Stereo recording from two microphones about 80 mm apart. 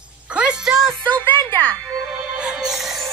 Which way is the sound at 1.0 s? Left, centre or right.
Left.